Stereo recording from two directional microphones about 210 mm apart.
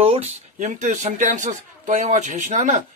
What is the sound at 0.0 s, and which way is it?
Speech, 30° right (ahead or behind).